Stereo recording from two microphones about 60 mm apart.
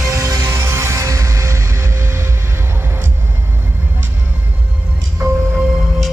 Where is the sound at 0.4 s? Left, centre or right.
Right.